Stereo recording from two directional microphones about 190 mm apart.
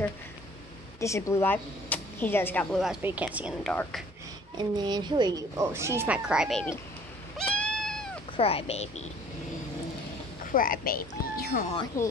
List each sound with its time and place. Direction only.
1.0 s speech: 15° left (ahead or behind)
3.0 s speech: 10° right (ahead or behind)
4.6 s speech: 20° right (ahead or behind); by 6.6 s 5° right (ahead or behind)
7.3 s goat: 5° left (ahead or behind)
8.4 s speech: 30° left (ahead or behind)
10.4 s speech: 45° left (ahead or behind)
11.9 s speech: 15° left (ahead or behind)